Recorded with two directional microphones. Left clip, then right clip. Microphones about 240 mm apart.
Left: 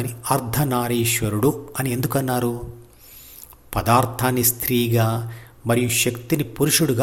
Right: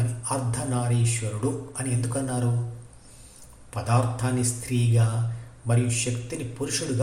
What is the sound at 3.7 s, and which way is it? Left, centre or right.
A man's voice, left.